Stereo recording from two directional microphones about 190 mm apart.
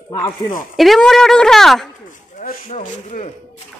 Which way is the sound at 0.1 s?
20° left (ahead or behind).